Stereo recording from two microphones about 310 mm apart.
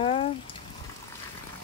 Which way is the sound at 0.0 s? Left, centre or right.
Centre.